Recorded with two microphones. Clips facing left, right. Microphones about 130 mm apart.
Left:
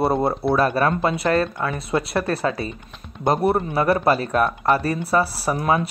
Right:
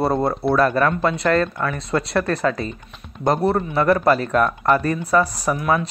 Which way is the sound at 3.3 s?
15° left (ahead or behind).